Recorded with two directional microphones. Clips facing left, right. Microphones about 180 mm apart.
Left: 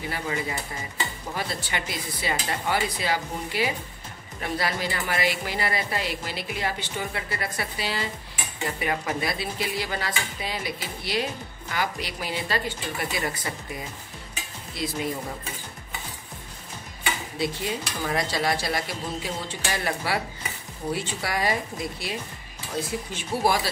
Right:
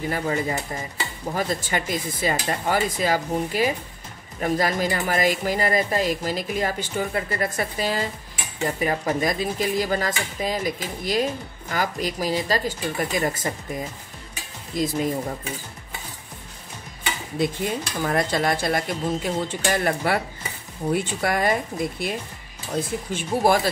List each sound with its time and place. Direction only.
0.1 s speech: 45° right (ahead or behind)
14.7 s speech: 45° right (ahead or behind)
17.4 s speech: 50° right (ahead or behind)